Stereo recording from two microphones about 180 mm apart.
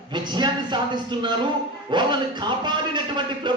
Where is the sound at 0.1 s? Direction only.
25° right (ahead or behind).